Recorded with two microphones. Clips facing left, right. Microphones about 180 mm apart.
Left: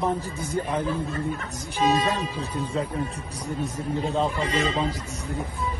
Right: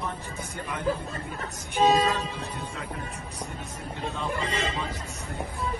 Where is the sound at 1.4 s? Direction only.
35° right (ahead or behind).